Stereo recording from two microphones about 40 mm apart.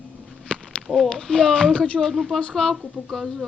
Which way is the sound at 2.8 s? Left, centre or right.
Centre.